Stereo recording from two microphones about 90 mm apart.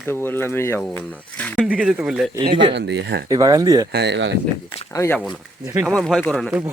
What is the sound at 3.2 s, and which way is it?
Speech, 45° right (ahead or behind).